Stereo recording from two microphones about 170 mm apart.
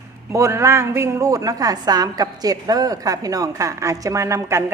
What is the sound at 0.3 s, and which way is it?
A woman's voice, 15° right (ahead or behind).